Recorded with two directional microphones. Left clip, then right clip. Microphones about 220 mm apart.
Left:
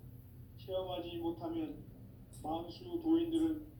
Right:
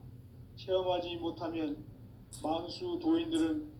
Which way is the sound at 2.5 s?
45° right (ahead or behind).